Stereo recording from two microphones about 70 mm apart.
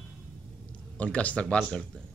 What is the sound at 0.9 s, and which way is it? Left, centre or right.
Speech, centre.